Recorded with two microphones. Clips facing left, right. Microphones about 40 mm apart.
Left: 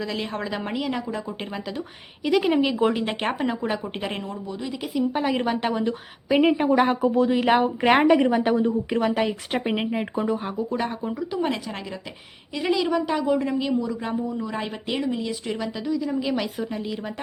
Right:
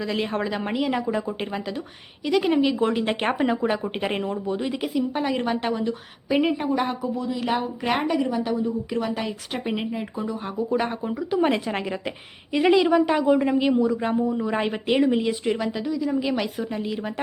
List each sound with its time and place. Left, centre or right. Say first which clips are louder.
0.0 s a woman's voice: right 3 dB; centre
4.2 s a woman's voice: right 5 dB; right
4.8 s a woman's voice: even; centre
6.7 s a woman's voice: left 5 dB; left
7.0 s speech: left 7 dB; left
7.3 s a woman's voice: left 6 dB; left
8.9 s speech: left 4 dB; left
10.4 s a woman's voice: right 2 dB; centre
11.3 s a woman's voice: right 7 dB; right
15.4 s speech: right 3 dB; centre